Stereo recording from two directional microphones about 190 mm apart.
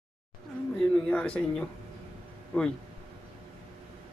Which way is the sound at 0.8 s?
5° left (ahead or behind).